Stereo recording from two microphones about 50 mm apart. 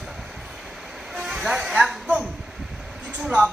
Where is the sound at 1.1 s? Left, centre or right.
Centre.